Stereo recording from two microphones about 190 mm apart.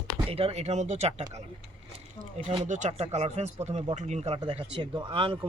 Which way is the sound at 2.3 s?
30° right (ahead or behind).